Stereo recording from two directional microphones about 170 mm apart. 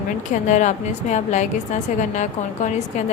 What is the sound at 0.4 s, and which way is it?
A woman's voice, 45° left (ahead or behind).